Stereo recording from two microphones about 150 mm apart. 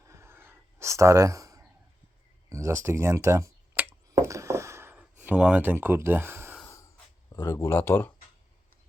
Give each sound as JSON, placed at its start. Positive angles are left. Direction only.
{"t": 0.0, "sound": "a sound", "side_deg": -20}
{"t": 5.2, "sound": "speech", "side_deg": -10}
{"t": 6.7, "sound": "snort", "side_deg": 20}
{"t": 7.4, "sound": "speech", "side_deg": 20}